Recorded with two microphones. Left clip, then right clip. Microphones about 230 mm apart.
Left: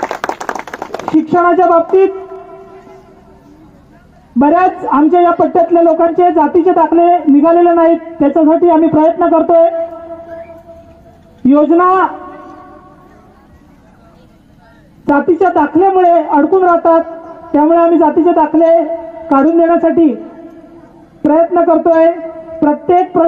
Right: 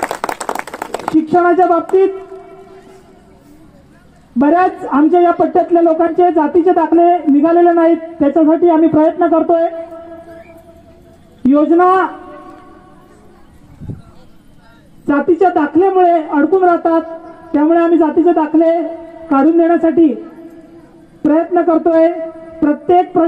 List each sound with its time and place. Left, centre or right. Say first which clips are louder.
0.3 s clapping: left 1 dB; right
1.2 s a man's voice: left 2 dB; left
4.4 s a man's voice: left 2 dB; left
11.5 s a man's voice: left 1 dB; left
15.0 s a man's voice: left 2 dB; left
21.3 s a man's voice: left 3 dB; left